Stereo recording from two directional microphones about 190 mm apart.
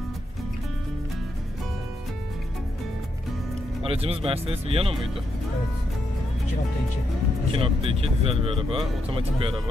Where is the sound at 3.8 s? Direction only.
30° right (ahead or behind).